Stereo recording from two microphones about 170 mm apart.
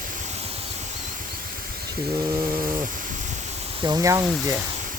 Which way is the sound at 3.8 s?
20° right (ahead or behind).